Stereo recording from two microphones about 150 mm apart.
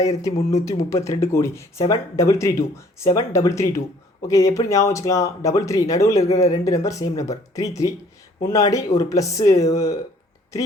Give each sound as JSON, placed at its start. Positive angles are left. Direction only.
{"t": 0.0, "sound": "speech", "side_deg": 25}